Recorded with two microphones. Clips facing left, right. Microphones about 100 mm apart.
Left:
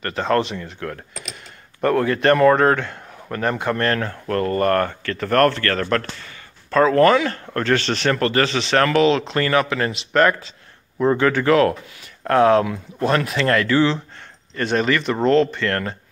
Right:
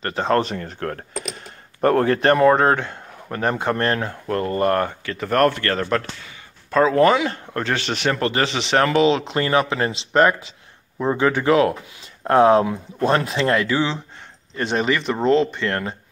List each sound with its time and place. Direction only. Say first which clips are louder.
0.0 s speech: even; 25° right (ahead or behind)
2.1 s speech: left 1 dB; 25° right (ahead or behind)